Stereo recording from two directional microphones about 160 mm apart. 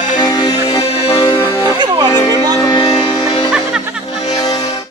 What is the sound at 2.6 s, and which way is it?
Music, 25° left (ahead or behind).